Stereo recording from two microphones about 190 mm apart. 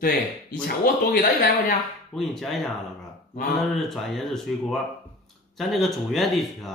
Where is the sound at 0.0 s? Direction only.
50° left (ahead or behind).